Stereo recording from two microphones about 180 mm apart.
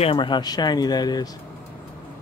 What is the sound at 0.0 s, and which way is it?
Speech, 30° left (ahead or behind).